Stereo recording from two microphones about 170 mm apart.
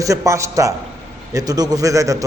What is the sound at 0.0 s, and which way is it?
A man's voice, 20° right (ahead or behind).